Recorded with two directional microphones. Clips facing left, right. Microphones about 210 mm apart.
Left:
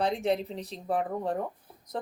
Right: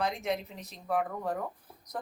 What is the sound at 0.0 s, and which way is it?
A woman's voice, 35° left (ahead or behind).